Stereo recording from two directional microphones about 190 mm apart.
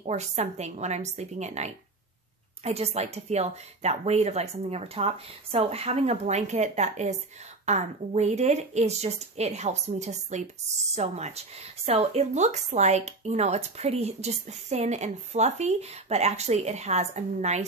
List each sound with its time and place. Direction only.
0.0 s speech: 35° right (ahead or behind)